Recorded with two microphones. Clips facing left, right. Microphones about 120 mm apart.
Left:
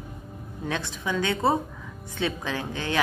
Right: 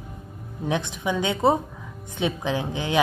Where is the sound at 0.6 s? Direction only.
20° right (ahead or behind).